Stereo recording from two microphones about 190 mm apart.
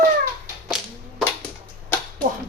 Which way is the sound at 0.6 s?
Centre (ahead or behind).